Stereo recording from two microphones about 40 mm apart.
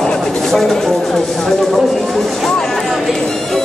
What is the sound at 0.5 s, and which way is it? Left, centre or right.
Speech, centre.